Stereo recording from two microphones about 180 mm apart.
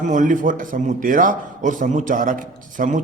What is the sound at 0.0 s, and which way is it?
A man's voice, 45° right (ahead or behind).